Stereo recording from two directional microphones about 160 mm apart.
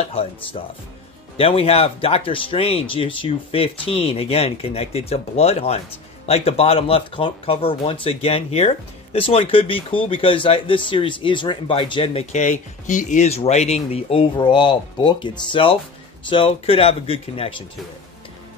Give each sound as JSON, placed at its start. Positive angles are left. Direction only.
{"t": 0.0, "sound": "speech", "side_deg": 35}